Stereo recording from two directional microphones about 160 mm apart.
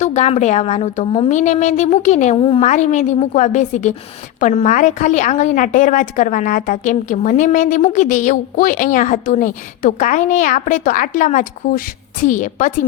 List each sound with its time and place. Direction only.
0.0 s a woman's voice: 45° left (ahead or behind)
2.6 s a woman's voice: 50° left (ahead or behind)